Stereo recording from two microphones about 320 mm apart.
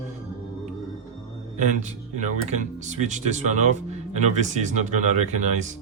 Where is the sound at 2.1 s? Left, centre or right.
Right.